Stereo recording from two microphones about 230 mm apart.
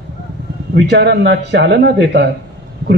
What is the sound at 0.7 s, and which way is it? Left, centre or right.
A man's voice, right.